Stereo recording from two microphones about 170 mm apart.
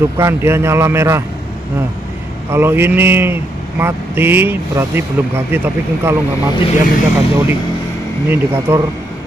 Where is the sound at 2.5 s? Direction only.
15° right (ahead or behind).